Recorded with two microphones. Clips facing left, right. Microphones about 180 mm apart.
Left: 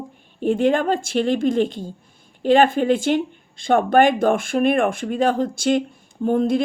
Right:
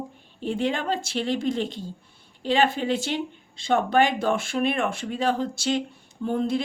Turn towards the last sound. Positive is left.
turn(degrees=50)  # may be behind; listen again after turning